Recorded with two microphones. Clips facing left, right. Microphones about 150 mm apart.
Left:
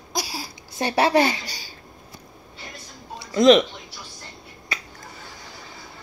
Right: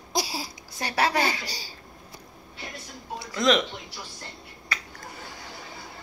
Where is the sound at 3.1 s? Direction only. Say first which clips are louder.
Left 8 dB; 20° left (ahead or behind).